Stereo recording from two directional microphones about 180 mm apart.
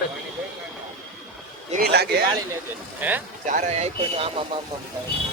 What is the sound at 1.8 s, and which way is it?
Speech, 65° right (ahead or behind).